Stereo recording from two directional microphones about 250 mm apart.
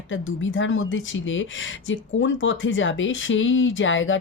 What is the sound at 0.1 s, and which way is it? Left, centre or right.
Speech, left.